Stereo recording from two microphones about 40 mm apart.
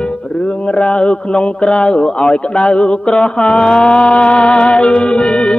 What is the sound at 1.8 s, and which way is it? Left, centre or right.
Mantra, left.